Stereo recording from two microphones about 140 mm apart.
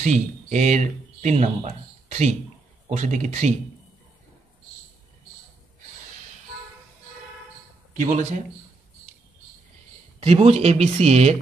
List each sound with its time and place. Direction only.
0.0 s speech: 55° right (ahead or behind)
8.0 s a man's voice: 60° right (ahead or behind)
10.2 s speech: 45° right (ahead or behind)